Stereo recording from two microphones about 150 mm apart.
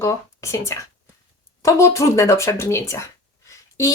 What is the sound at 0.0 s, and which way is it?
Speech, 20° left (ahead or behind).